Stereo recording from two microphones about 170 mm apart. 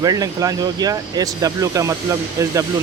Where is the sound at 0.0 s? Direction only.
20° right (ahead or behind).